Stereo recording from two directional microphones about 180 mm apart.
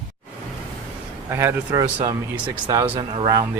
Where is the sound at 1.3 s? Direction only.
15° right (ahead or behind).